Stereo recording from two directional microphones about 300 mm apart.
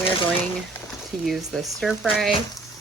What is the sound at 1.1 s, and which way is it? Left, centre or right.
Speech, centre.